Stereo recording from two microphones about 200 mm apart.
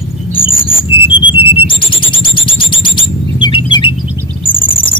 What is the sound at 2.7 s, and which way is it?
Bird, 25° left (ahead or behind).